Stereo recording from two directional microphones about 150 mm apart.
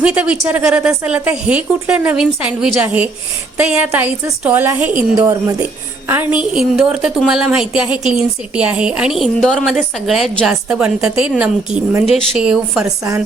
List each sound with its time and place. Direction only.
0.0 s a woman's voice: 5° right (ahead or behind)
5.1 s a woman's voice: 25° right (ahead or behind)
6.1 s a woman's voice: 10° right (ahead or behind)